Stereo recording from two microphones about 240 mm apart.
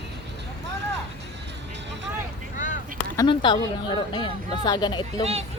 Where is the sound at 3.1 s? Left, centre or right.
Centre.